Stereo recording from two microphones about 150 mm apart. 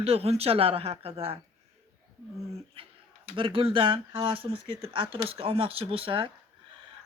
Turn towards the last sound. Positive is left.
turn(degrees=-35)  # may be behind; listen again after turning